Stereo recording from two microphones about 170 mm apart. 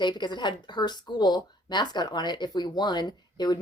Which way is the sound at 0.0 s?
25° left (ahead or behind).